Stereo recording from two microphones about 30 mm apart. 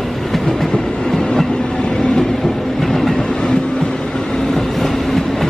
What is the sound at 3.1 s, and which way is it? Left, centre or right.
Train, left.